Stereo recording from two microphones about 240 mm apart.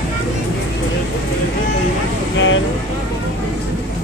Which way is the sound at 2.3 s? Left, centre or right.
Left.